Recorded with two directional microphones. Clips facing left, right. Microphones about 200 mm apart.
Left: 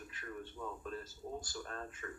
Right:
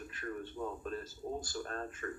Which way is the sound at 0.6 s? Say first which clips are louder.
Right 5 dB; 40° right (ahead or behind).